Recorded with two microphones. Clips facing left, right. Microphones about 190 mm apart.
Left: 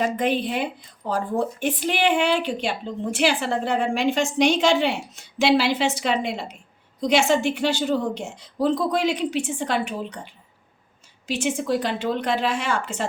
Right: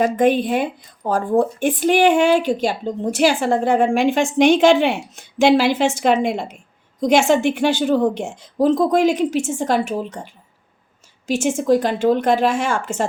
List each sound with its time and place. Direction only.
0.0 s speech: 45° right (ahead or behind)
11.3 s speech: 45° right (ahead or behind)